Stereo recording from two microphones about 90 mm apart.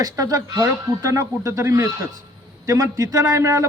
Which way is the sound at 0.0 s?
45° right (ahead or behind).